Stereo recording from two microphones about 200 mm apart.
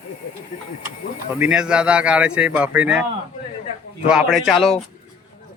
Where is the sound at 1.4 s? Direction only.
5° right (ahead or behind).